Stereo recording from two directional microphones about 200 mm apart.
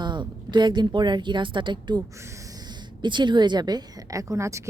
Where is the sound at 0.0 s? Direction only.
20° right (ahead or behind).